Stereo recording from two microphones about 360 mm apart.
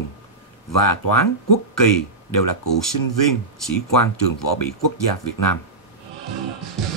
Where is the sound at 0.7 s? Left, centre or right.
Left.